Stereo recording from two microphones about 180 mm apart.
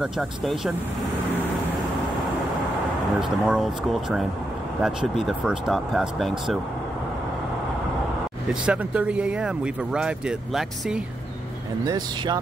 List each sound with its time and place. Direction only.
0.0 s speech: centre (ahead or behind)
3.2 s speech: 5° right (ahead or behind)
8.6 s speech: 5° right (ahead or behind)
11.8 s speech: 20° right (ahead or behind)